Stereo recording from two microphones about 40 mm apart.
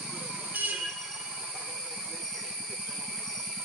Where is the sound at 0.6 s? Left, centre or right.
Right.